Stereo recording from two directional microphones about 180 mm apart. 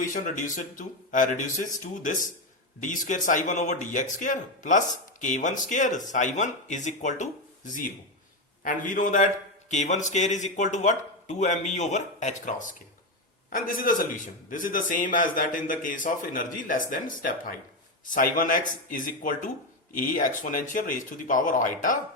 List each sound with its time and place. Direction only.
0.0 s a man's voice: 45° left (ahead or behind)